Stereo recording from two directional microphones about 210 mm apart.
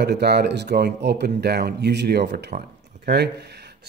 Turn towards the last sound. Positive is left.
turn(degrees=-50)  # may be behind; listen again after turning